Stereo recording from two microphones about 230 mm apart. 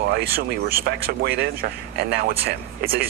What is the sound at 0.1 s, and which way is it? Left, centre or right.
Speech, right.